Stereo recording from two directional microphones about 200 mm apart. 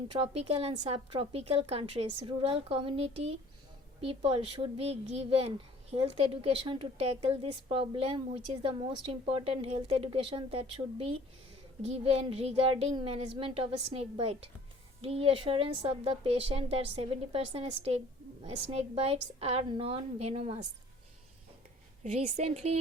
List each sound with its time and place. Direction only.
0.1 s a woman's voice: 30° right (ahead or behind)
22.0 s a woman's voice: 30° right (ahead or behind)